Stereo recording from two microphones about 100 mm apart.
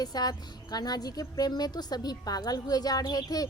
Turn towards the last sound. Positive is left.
turn(degrees=40)  # may be behind; listen again after turning